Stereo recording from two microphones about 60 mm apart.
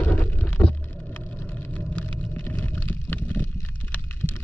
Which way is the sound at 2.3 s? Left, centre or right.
Left.